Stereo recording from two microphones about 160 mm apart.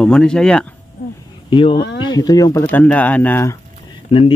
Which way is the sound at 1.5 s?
35° left (ahead or behind).